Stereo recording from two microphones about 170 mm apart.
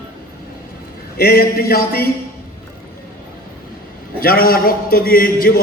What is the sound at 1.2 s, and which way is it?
Speech, 65° left (ahead or behind).